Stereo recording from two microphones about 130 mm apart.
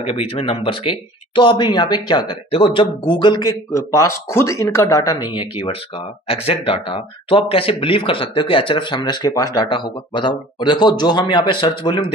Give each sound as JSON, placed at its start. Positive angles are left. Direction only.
{"t": 0.0, "sound": "speech", "side_deg": 45}